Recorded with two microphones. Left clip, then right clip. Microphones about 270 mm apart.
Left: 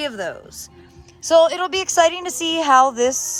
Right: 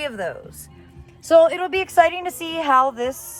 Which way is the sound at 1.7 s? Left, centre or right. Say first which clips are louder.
Even; centre.